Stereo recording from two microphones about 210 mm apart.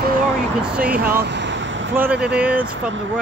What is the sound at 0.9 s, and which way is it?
Vehicle, 45° right (ahead or behind).